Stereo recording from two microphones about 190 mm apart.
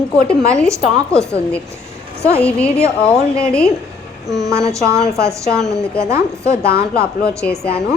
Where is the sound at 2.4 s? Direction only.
5° left (ahead or behind).